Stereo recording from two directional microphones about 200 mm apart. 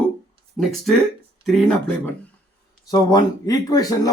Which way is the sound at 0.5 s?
Centre (ahead or behind).